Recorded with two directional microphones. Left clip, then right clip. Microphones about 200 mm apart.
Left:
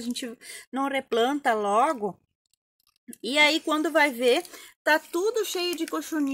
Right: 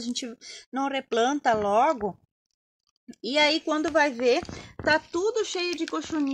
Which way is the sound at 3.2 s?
Centre (ahead or behind).